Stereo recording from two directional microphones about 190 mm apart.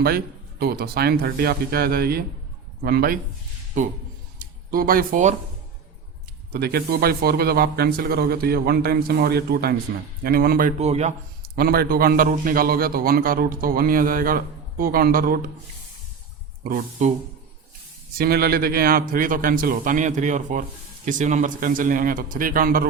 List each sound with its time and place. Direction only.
0.6 s a man's voice: 55° right (ahead or behind)
4.7 s a man's voice: 50° right (ahead or behind)
6.5 s a man's voice: 55° right (ahead or behind)
10.8 s speech: 35° right (ahead or behind)
11.4 s a man's voice: 55° right (ahead or behind)
16.6 s a man's voice: 45° right (ahead or behind)
18.2 s a man's voice: 55° right (ahead or behind)